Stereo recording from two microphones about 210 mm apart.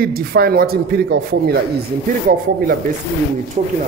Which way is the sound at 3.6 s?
35° right (ahead or behind).